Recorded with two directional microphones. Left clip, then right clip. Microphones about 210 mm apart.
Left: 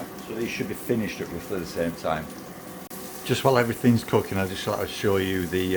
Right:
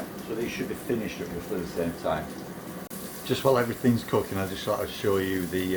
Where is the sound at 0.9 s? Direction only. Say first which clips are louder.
Left 4 dB; 60° left (ahead or behind).